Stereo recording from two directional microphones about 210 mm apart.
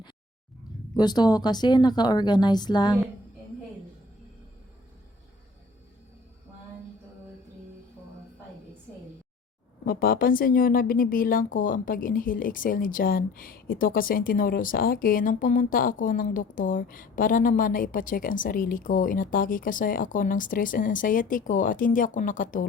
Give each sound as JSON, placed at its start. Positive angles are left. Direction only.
{"t": 0.9, "sound": "speech", "side_deg": 20}
{"t": 9.8, "sound": "a woman's voice", "side_deg": 45}